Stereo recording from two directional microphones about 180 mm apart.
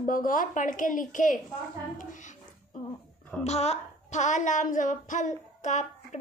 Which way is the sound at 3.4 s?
35° left (ahead or behind).